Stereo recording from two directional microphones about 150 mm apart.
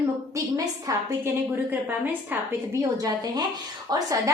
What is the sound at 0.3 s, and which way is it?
A woman's voice, 20° right (ahead or behind).